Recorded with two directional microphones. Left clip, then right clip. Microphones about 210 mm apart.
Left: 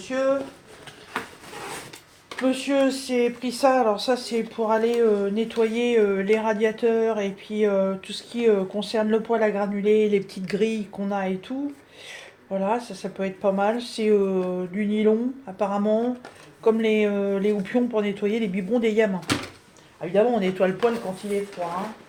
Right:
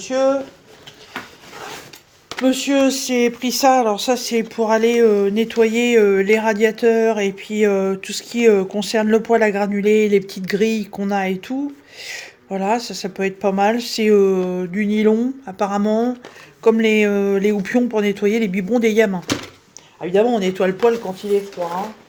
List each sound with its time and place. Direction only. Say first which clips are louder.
0.0 s speech: right 6 dB; 55° right (ahead or behind)
1.2 s a sound: even; 25° right (ahead or behind)
2.3 s speech: right 5 dB; 55° right (ahead or behind)
20.0 s speech: right 4 dB; 55° right (ahead or behind)